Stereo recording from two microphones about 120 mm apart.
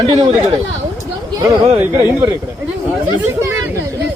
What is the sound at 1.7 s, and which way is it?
Speech, 15° right (ahead or behind).